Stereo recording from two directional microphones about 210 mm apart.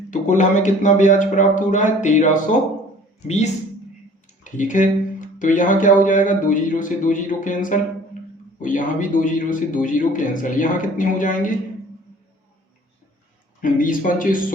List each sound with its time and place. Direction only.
0.1 s speech: 35° left (ahead or behind)
13.6 s speech: 40° left (ahead or behind)